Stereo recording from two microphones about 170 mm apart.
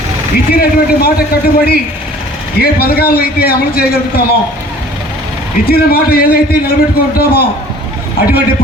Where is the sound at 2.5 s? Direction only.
60° left (ahead or behind).